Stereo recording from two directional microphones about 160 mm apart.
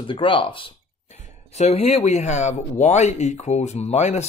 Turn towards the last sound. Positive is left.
turn(degrees=40)  # may be behind; listen again after turning